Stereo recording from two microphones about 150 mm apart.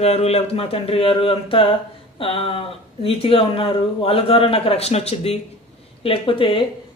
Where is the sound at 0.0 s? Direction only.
45° left (ahead or behind).